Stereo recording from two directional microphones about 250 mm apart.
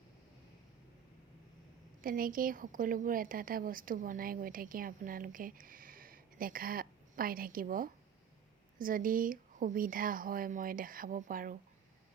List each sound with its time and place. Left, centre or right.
2.0 s a woman's voice: right